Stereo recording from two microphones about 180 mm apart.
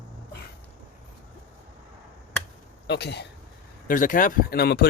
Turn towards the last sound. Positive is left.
turn(degrees=60)  # may be behind; listen again after turning